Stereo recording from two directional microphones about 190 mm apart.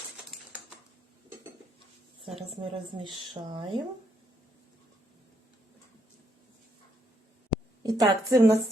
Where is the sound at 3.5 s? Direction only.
25° right (ahead or behind).